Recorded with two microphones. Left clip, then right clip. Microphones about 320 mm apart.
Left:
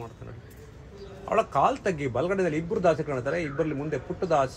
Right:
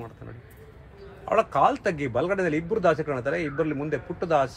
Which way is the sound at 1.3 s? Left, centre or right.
Right.